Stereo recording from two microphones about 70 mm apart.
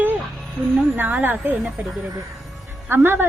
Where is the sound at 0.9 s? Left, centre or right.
Right.